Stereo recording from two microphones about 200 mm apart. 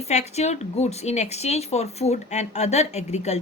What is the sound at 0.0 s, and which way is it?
Speech, 35° left (ahead or behind).